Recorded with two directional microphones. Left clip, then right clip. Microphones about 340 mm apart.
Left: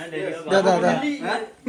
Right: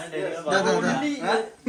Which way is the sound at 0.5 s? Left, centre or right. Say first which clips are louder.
Left 5 dB; centre.